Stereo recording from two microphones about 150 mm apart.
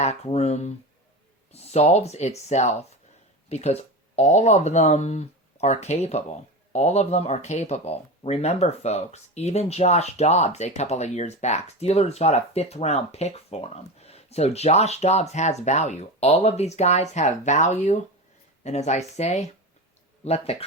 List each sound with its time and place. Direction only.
0.0 s speech: 45° left (ahead or behind)